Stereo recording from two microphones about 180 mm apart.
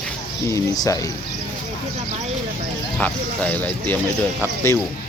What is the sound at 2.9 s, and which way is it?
Speech, 5° left (ahead or behind).